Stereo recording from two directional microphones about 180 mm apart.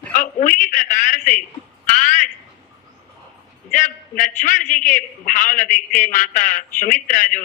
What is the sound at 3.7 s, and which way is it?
A man's voice, 45° left (ahead or behind).